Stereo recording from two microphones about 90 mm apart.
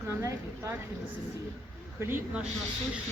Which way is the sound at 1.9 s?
25° right (ahead or behind).